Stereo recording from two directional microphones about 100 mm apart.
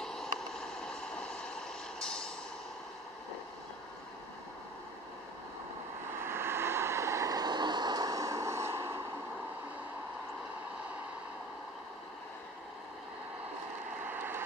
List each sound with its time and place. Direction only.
0.0 s vehicle: 5° left (ahead or behind)
6.2 s vehicle: 25° right (ahead or behind)
14.0 s vehicle: 20° right (ahead or behind)